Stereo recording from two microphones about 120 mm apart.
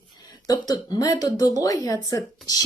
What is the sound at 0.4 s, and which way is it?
Speech, 35° left (ahead or behind).